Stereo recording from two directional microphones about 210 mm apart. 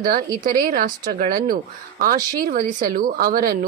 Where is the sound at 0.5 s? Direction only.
40° right (ahead or behind).